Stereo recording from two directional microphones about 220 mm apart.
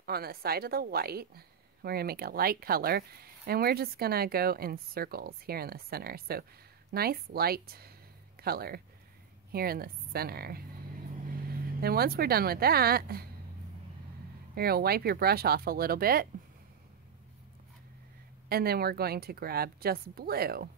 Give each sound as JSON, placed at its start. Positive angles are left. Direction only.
{"t": 0.0, "sound": "a woman's voice", "side_deg": -45}
{"t": 14.5, "sound": "a woman's voice", "side_deg": -45}
{"t": 18.5, "sound": "a woman's voice", "side_deg": -45}